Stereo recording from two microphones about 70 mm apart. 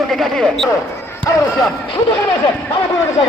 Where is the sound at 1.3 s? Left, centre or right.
Left.